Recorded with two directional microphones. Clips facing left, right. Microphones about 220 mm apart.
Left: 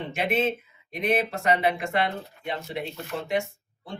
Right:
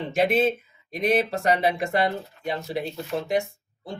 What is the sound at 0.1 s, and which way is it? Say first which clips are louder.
Speech: right 5 dB; 35° right (ahead or behind).